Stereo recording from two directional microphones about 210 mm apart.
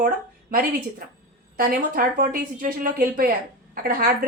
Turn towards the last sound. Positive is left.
turn(degrees=-45)  # may be behind; listen again after turning